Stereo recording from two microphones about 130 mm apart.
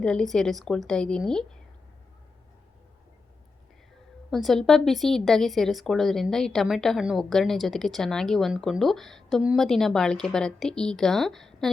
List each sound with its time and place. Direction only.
0.0 s speech: 5° left (ahead or behind)
4.3 s speech: centre (ahead or behind)